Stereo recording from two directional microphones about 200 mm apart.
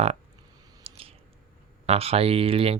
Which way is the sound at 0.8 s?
30° right (ahead or behind).